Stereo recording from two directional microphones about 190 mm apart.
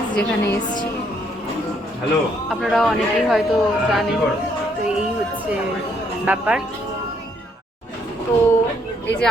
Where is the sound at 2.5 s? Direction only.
Centre (ahead or behind).